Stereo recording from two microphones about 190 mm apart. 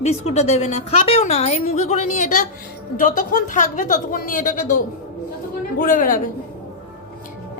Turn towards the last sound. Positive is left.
turn(degrees=45)  # may be behind; listen again after turning